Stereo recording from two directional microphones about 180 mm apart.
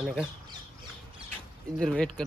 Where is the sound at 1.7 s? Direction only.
Centre (ahead or behind).